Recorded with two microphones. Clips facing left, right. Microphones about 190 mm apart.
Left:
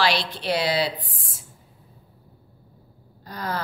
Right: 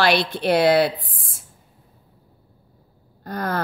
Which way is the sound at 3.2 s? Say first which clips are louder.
Right 5 dB; 55° right (ahead or behind).